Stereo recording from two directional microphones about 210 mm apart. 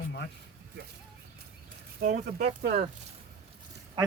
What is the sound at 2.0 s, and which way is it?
Speech, 40° right (ahead or behind).